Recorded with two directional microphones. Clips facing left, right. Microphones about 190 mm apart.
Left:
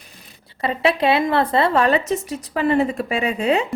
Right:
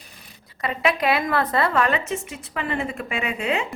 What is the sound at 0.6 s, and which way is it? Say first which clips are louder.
A woman's voice: left 4 dB; 30° left (ahead or behind).